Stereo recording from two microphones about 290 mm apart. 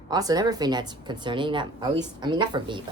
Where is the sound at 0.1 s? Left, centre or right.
Centre.